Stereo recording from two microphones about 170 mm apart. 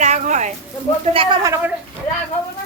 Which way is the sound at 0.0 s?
45° right (ahead or behind).